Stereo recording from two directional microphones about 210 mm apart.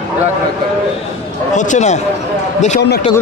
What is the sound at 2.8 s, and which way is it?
Speech, 50° left (ahead or behind).